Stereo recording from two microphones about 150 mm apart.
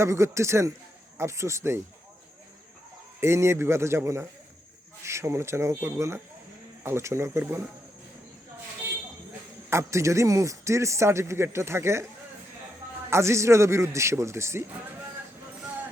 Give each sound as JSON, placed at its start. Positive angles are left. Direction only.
{"t": 0.0, "sound": "a man's voice", "side_deg": -20}
{"t": 3.2, "sound": "speech", "side_deg": -15}
{"t": 9.6, "sound": "a man's voice", "side_deg": -20}
{"t": 13.1, "sound": "a man's voice", "side_deg": -20}